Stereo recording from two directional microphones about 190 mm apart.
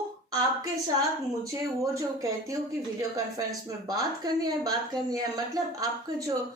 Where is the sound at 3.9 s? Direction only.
20° right (ahead or behind).